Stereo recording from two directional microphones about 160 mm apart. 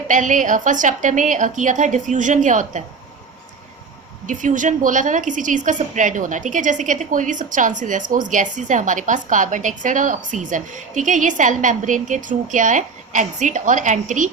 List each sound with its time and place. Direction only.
0.1 s a woman's voice: 50° right (ahead or behind)
4.3 s a woman's voice: 55° right (ahead or behind)